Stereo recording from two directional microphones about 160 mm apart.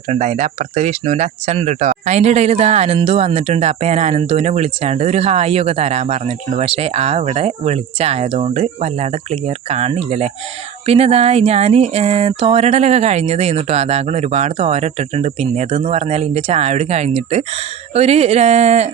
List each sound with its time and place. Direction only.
0.1 s speech: 45° right (ahead or behind)